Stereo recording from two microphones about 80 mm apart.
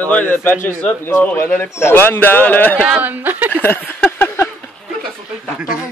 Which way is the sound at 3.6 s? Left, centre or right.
Left.